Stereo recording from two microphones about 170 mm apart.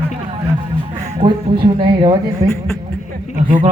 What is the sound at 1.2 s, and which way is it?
A woman's voice, 25° right (ahead or behind).